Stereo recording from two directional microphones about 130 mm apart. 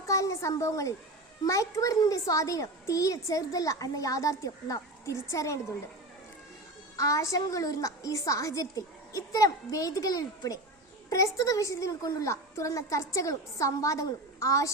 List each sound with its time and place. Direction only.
0.0 s a sound: 25° left (ahead or behind)
1.5 s a woman's voice: 25° left (ahead or behind)
6.9 s a woman's voice: 25° left (ahead or behind)